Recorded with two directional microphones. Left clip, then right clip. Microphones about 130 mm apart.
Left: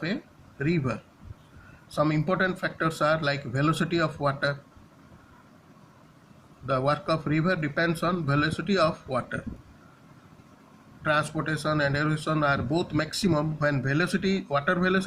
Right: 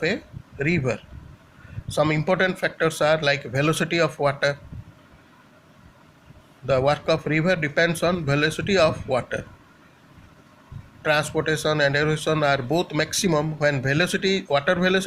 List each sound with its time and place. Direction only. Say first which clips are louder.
0.6 s speech: right 5 dB; 35° right (ahead or behind)
6.7 s speech: right 5 dB; 35° right (ahead or behind)
11.0 s speech: right 4 dB; 40° right (ahead or behind)